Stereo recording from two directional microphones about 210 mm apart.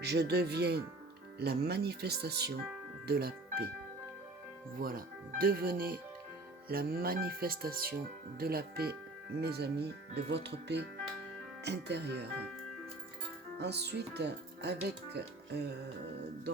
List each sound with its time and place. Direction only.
0.0 s speech: 50° right (ahead or behind)
4.8 s speech: 45° right (ahead or behind)
13.6 s speech: 50° right (ahead or behind)